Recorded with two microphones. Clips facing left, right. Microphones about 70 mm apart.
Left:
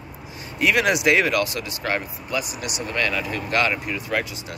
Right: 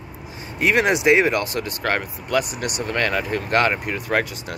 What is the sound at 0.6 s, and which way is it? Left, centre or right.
Speech, right.